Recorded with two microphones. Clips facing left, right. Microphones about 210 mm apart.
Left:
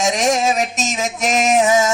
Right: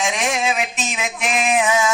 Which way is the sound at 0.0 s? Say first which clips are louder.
Left 5 dB; 40° left (ahead or behind).